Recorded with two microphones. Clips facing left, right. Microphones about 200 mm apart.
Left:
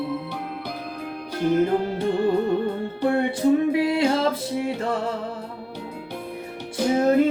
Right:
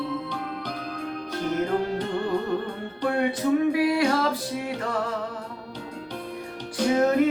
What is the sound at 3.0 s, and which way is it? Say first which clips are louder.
Music: left 3 dB; 25° left (ahead or behind).